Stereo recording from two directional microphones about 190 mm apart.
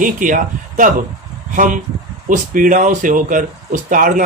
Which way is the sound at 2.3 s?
45° right (ahead or behind).